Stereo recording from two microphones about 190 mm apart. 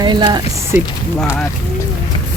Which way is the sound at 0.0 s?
25° right (ahead or behind).